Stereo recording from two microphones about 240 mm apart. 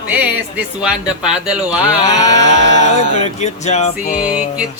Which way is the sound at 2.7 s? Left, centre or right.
Right.